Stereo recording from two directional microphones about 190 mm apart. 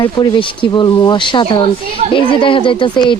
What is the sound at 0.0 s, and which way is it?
Speech, 25° left (ahead or behind).